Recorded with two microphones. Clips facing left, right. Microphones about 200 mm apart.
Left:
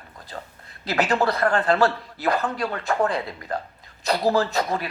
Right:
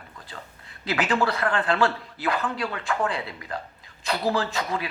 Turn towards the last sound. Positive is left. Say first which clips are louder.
# left 4 dB
turn(degrees=40)  # may be behind; listen again after turning